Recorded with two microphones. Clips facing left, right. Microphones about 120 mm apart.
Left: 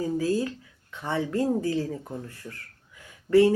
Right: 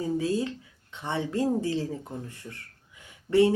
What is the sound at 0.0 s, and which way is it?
Speech, 25° right (ahead or behind).